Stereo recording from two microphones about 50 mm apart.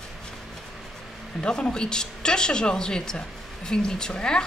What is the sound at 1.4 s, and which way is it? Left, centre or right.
A woman's voice, centre.